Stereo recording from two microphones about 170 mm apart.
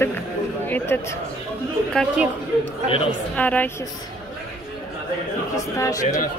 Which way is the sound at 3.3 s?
10° left (ahead or behind).